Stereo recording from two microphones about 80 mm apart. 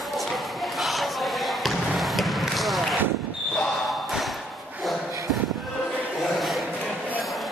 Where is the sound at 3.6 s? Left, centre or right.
Centre.